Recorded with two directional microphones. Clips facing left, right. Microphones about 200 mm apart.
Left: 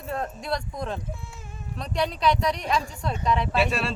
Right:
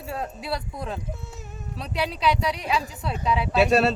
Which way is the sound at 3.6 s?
40° right (ahead or behind).